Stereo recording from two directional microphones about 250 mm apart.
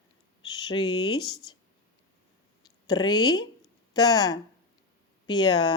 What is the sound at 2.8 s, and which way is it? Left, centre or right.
Speech, centre.